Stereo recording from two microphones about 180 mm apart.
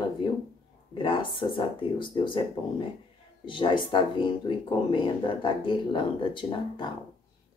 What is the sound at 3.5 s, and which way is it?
Speech, 25° left (ahead or behind).